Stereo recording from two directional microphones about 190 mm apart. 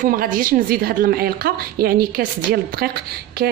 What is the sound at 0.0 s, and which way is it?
A woman's voice, 50° right (ahead or behind).